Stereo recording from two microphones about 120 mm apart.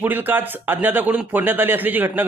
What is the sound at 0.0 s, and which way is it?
Speech, 15° right (ahead or behind).